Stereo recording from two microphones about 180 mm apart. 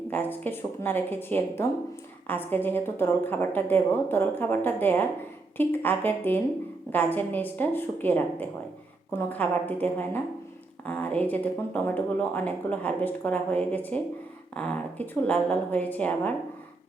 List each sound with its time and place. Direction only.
0.1 s speech: 10° left (ahead or behind)